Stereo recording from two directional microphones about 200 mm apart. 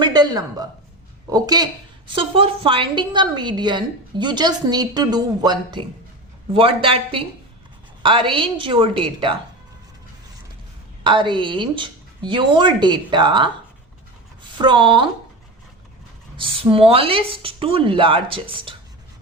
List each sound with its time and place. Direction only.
0.0 s a woman's voice: 20° right (ahead or behind)
11.0 s a woman's voice: 25° right (ahead or behind)
14.6 s a woman's voice: 25° right (ahead or behind)
16.4 s a woman's voice: 25° right (ahead or behind)